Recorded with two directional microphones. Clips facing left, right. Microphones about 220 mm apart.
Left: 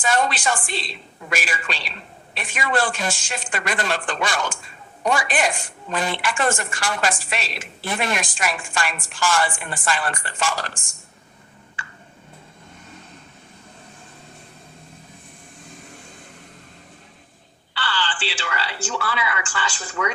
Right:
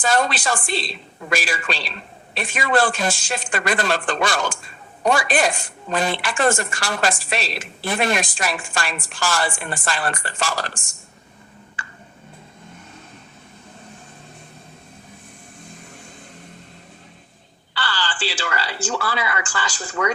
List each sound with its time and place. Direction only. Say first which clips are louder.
0.0 s a woman's voice: right 1 dB; 35° right (ahead or behind)
17.7 s a woman's voice: right 1 dB; 40° right (ahead or behind)